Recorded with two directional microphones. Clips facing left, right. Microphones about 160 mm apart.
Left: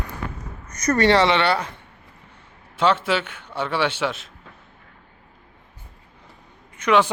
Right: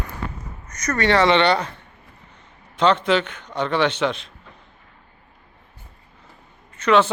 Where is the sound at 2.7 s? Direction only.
5° left (ahead or behind).